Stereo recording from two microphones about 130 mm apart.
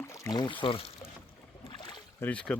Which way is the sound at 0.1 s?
30° left (ahead or behind).